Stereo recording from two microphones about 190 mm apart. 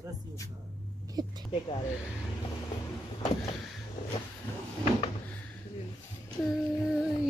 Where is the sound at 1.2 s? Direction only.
20° right (ahead or behind).